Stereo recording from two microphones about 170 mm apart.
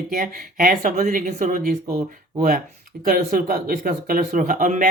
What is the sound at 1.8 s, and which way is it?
Speech, 20° right (ahead or behind).